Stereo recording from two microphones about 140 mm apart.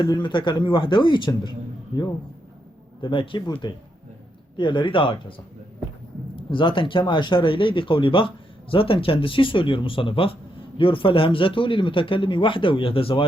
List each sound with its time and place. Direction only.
0.0 s a man's voice: 35° left (ahead or behind)
6.3 s a man's voice: 35° left (ahead or behind)